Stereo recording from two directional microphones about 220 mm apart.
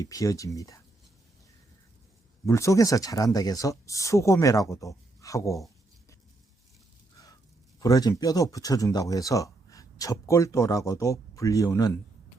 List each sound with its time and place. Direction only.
0.0 s speech: 15° left (ahead or behind)
2.5 s speech: 15° left (ahead or behind)
7.8 s speech: 15° left (ahead or behind)